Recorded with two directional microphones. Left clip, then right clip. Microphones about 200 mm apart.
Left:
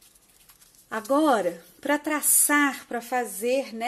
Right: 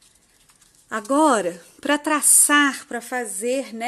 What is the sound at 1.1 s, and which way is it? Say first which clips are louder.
Speech: right 4 dB; 25° right (ahead or behind).